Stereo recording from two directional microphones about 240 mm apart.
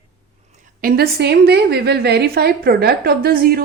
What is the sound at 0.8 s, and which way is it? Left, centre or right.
A woman's voice, right.